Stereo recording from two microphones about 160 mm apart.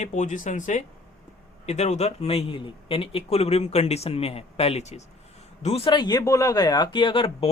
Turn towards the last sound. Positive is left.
turn(degrees=35)  # may be behind; listen again after turning